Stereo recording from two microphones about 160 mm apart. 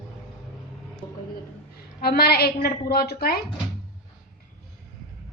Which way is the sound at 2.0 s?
75° left (ahead or behind).